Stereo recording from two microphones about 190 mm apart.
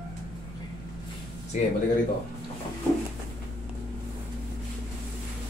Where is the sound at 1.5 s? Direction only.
40° left (ahead or behind).